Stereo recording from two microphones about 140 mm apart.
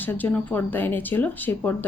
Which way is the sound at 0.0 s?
15° left (ahead or behind).